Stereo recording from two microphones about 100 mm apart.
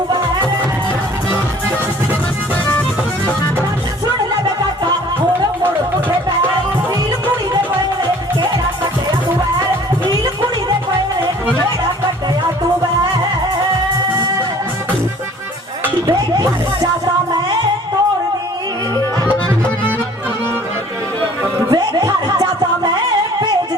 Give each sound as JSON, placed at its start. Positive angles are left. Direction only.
{"t": 16.0, "sound": "music", "side_deg": -40}
{"t": 21.7, "sound": "music", "side_deg": -45}